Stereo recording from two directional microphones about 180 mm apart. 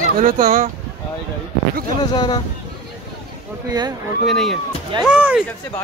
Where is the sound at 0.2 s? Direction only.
50° right (ahead or behind).